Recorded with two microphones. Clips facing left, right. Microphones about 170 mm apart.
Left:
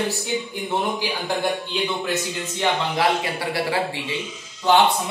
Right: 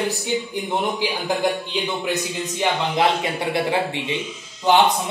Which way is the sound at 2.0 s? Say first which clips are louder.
Right 1 dB; 15° right (ahead or behind).